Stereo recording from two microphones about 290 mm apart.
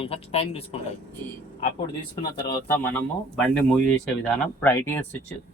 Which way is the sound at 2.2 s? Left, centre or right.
Centre.